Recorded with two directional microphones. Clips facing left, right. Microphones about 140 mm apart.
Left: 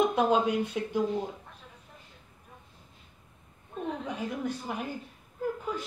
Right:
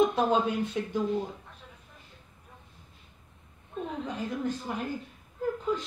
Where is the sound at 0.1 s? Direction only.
10° left (ahead or behind).